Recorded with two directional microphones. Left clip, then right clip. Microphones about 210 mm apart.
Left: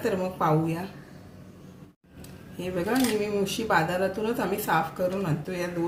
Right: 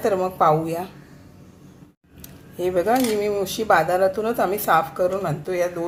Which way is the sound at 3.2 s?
35° right (ahead or behind).